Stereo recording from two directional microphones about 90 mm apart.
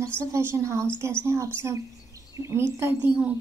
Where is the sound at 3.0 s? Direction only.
15° right (ahead or behind).